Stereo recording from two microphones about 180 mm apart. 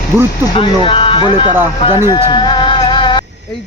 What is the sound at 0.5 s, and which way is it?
Speech, 30° left (ahead or behind).